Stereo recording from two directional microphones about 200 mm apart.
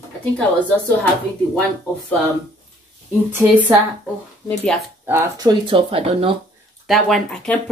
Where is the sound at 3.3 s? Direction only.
10° right (ahead or behind).